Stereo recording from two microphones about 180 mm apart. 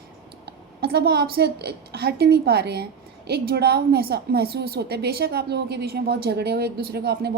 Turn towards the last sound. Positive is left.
turn(degrees=-60)  # may be behind; listen again after turning